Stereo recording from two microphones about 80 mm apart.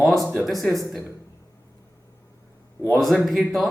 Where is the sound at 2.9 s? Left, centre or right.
Centre.